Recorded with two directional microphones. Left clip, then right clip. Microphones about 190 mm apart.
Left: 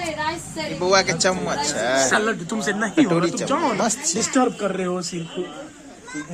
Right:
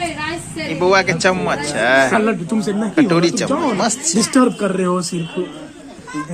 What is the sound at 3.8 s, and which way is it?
Speech, 15° left (ahead or behind).